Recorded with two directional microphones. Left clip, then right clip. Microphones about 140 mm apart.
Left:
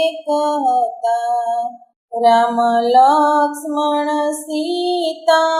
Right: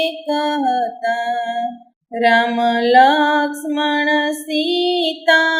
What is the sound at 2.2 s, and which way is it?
Female singing, 35° right (ahead or behind).